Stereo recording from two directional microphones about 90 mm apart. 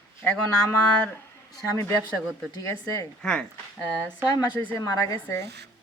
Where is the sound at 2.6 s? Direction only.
35° left (ahead or behind).